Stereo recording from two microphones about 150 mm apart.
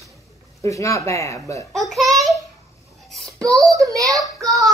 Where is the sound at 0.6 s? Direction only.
20° left (ahead or behind).